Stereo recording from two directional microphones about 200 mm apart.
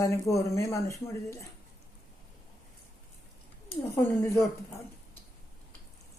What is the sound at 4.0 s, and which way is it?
Speech, 10° left (ahead or behind).